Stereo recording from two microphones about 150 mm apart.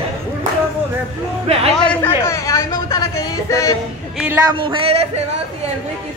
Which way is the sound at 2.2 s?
20° left (ahead or behind).